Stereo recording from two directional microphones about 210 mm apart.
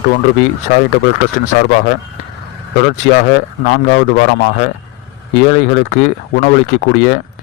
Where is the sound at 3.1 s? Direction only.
45° left (ahead or behind).